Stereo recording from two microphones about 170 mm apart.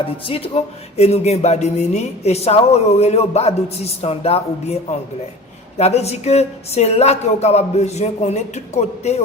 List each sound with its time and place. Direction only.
0.0 s speech: 35° left (ahead or behind)